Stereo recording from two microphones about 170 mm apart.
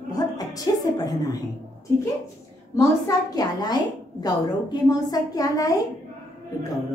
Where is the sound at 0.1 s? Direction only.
20° left (ahead or behind).